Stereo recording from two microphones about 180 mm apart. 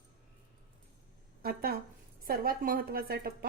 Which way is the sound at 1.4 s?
55° right (ahead or behind).